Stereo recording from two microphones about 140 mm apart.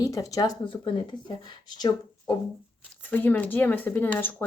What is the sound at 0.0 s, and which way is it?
Speech, 25° left (ahead or behind).